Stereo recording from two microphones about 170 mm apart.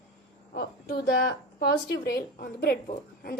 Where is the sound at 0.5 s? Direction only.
60° left (ahead or behind).